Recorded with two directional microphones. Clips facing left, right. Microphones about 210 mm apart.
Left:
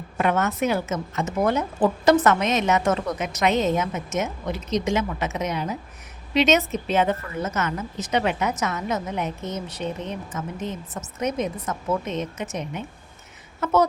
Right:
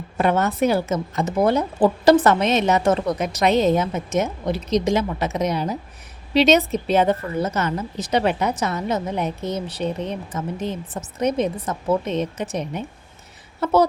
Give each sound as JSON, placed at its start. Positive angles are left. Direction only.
{"t": 0.2, "sound": "a woman's voice", "side_deg": -30}